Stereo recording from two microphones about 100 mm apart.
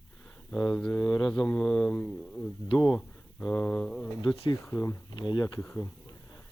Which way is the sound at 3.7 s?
5° left (ahead or behind).